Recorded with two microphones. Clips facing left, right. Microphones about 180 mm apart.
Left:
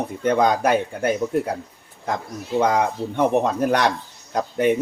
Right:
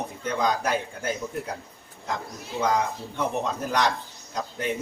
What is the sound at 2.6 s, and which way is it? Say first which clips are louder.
Speech: left 5 dB; 60° left (ahead or behind).